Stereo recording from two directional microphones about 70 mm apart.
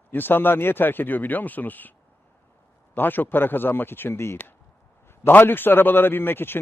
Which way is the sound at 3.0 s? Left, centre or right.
Left.